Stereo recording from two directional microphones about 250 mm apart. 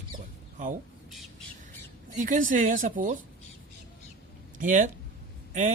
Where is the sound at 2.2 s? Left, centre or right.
Right.